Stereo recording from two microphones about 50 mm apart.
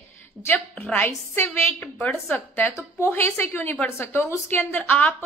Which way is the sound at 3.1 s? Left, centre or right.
Left.